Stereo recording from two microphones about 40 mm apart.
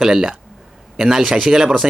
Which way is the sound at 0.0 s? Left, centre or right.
Centre.